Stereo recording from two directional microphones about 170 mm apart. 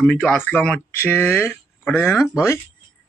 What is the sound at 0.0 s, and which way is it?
Speech, 10° left (ahead or behind).